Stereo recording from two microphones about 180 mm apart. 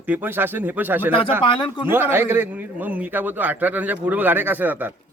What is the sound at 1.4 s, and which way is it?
Speech, 25° left (ahead or behind).